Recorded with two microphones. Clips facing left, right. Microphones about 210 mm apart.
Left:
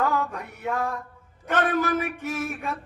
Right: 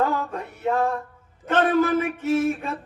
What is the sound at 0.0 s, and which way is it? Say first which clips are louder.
A man's voice: right 2 dB; 30° right (ahead or behind).